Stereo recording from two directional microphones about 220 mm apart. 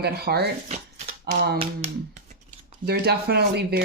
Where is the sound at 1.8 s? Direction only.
25° right (ahead or behind).